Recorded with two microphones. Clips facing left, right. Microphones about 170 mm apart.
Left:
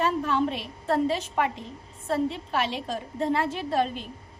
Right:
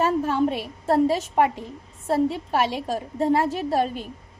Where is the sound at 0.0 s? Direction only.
45° right (ahead or behind).